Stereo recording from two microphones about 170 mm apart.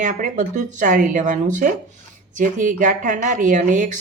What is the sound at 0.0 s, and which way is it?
Speech, 45° right (ahead or behind).